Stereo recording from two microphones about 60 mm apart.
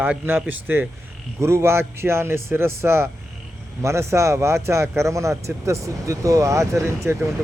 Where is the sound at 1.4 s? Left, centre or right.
Right.